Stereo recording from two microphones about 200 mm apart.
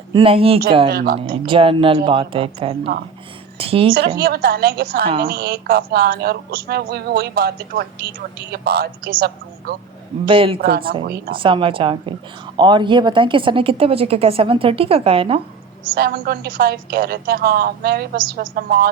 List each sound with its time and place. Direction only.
0.1 s a woman's voice: 25° right (ahead or behind)
0.9 s speech: 50° right (ahead or behind)
1.5 s a woman's voice: 25° right (ahead or behind)
4.2 s speech: 50° right (ahead or behind)
10.2 s a woman's voice: 25° right (ahead or behind)
10.6 s speech: 50° right (ahead or behind)
11.3 s a woman's voice: 25° right (ahead or behind)
16.0 s speech: 50° right (ahead or behind)